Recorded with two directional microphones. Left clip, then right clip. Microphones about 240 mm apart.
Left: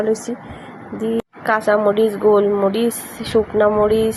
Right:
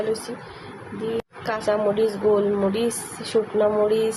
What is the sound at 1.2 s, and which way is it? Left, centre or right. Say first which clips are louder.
Speech: left 8 dB; centre.